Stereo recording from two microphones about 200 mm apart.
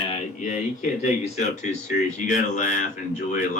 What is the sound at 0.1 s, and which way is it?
Speech, 35° left (ahead or behind).